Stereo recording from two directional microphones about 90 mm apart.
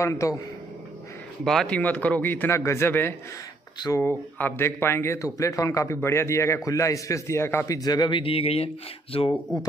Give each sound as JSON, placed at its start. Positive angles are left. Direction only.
{"t": 0.0, "sound": "a man's voice", "side_deg": 35}
{"t": 1.4, "sound": "speech", "side_deg": 5}
{"t": 1.8, "sound": "a man's voice", "side_deg": 15}
{"t": 7.7, "sound": "speech", "side_deg": 45}
{"t": 9.5, "sound": "speech", "side_deg": 50}